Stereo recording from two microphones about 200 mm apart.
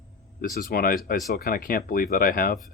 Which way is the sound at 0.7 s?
45° left (ahead or behind).